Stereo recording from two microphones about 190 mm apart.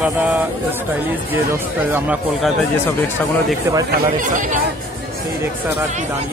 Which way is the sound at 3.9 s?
45° right (ahead or behind).